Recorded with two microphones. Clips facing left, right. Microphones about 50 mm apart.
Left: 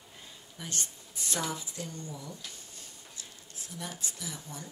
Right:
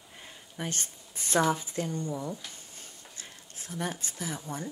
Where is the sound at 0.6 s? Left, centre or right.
Right.